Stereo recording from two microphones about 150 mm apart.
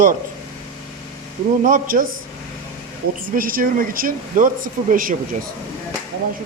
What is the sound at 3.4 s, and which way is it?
Speech, 70° right (ahead or behind).